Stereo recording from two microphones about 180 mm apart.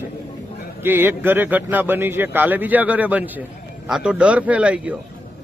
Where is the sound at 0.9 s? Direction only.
10° right (ahead or behind).